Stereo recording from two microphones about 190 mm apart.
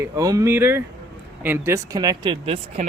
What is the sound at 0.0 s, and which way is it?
Speech, 15° right (ahead or behind).